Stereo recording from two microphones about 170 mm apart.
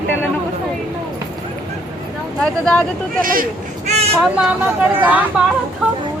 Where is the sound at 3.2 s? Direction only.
55° right (ahead or behind).